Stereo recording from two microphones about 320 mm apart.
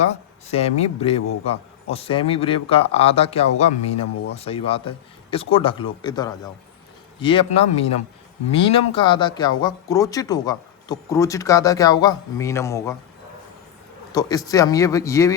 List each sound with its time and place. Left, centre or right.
0.0 s speech: left
14.1 s speech: centre